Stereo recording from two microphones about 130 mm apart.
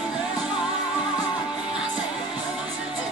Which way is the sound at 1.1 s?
35° left (ahead or behind).